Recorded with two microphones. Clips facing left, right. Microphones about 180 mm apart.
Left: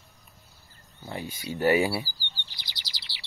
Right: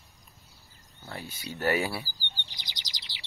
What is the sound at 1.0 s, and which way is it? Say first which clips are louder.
Speech: left 5 dB; 15° left (ahead or behind).